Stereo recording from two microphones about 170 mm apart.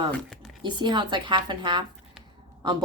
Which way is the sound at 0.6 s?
25° right (ahead or behind).